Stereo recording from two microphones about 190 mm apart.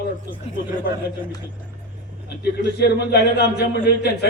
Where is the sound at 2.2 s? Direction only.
60° left (ahead or behind).